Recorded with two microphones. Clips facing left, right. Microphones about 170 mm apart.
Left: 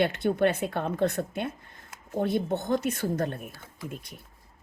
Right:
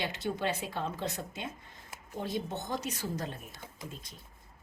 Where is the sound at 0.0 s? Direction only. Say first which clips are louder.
Left 10 dB; 55° left (ahead or behind).